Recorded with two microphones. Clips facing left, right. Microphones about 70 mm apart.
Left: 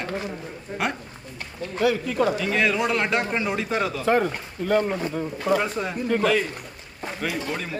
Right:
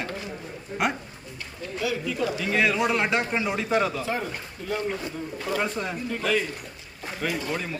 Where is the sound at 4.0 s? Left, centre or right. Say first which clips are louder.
Left 8 dB; left.